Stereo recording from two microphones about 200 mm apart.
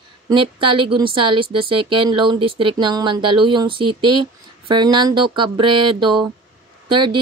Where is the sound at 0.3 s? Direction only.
25° right (ahead or behind).